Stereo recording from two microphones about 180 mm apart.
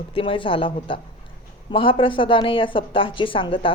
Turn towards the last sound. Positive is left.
turn(degrees=30)  # may be behind; listen again after turning